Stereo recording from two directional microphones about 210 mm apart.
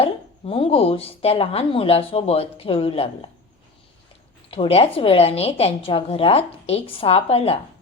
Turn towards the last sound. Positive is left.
turn(degrees=30)  # may be behind; listen again after turning